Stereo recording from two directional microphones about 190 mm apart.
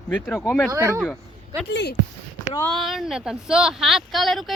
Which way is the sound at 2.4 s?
15° left (ahead or behind).